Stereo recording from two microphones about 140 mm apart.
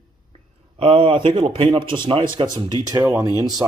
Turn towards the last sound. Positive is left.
turn(degrees=-25)  # may be behind; listen again after turning